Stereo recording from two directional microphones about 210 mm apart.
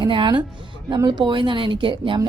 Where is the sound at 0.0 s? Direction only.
20° right (ahead or behind).